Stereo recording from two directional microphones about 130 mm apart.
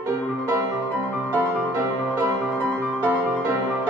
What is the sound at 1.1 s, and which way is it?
Music, 10° right (ahead or behind).